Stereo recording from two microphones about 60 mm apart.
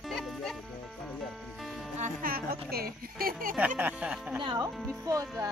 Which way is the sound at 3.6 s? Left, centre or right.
Right.